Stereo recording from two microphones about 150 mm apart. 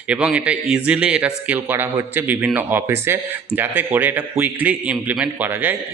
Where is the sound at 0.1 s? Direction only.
10° right (ahead or behind).